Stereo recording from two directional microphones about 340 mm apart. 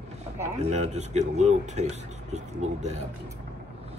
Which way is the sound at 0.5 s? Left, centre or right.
Centre.